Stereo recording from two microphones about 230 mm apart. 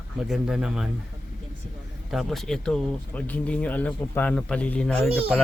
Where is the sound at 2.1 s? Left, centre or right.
Centre.